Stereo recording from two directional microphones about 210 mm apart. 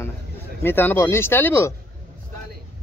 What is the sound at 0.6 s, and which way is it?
Speech, 10° left (ahead or behind).